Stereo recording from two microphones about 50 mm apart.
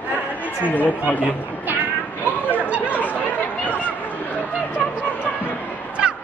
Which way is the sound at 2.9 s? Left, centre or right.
Left.